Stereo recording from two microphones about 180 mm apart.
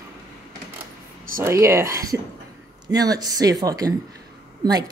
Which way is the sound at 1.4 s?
15° right (ahead or behind).